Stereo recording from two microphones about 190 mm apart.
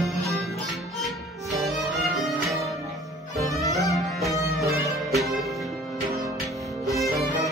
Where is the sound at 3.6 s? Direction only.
15° left (ahead or behind).